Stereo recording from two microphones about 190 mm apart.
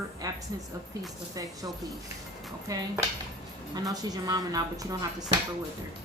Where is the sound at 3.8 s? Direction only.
20° right (ahead or behind).